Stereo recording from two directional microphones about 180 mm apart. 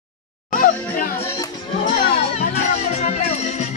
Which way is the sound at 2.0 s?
60° left (ahead or behind).